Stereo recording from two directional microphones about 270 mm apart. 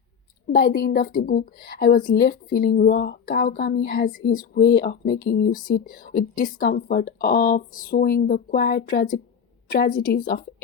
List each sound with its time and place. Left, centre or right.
0.5 s speech: left